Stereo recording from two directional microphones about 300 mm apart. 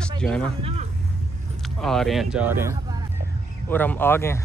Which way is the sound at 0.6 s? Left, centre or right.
Centre.